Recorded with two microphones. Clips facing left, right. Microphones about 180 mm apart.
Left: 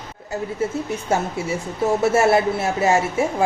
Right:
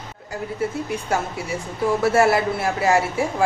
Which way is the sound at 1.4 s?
25° left (ahead or behind).